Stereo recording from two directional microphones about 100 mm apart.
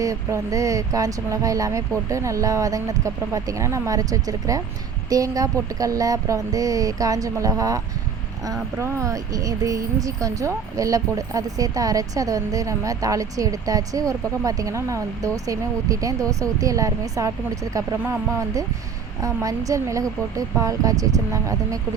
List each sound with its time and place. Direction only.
0.0 s speech: 35° right (ahead or behind)
8.8 s speech: 30° right (ahead or behind)
19.2 s speech: 35° right (ahead or behind)